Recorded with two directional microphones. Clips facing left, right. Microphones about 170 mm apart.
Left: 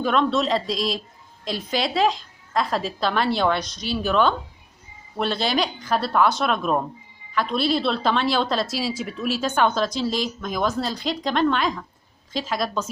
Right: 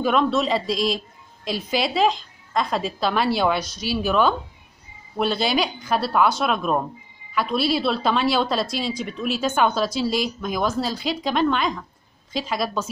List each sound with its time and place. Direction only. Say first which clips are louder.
0.0 s a woman's voice: right 1 dB; 5° right (ahead or behind)